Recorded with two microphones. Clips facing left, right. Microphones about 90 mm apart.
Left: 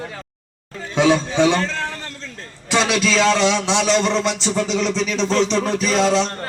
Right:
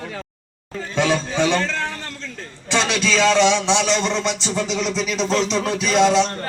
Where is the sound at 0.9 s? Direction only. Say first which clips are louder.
Left 4 dB; 15° left (ahead or behind).